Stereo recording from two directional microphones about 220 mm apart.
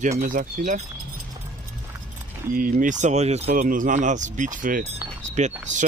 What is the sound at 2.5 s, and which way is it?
Speech, 40° right (ahead or behind).